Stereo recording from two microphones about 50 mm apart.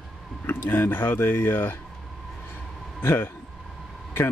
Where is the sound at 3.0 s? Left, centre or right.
Left.